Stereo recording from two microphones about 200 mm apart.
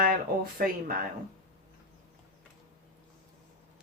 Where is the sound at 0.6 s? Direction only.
45° right (ahead or behind).